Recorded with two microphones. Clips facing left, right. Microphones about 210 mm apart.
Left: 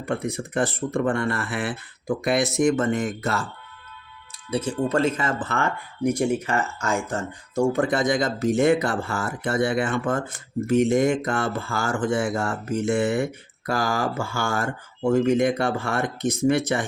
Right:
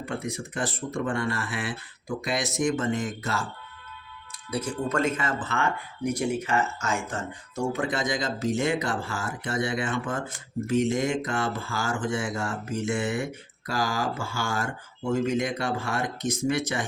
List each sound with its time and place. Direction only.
0.0 s speech: 55° left (ahead or behind)
4.5 s speech: 30° left (ahead or behind)
7.5 s speech: 50° left (ahead or behind)